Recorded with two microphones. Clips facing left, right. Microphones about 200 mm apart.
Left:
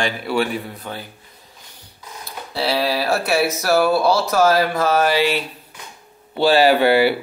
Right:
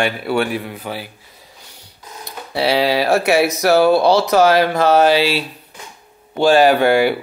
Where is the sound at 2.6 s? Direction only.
75° right (ahead or behind).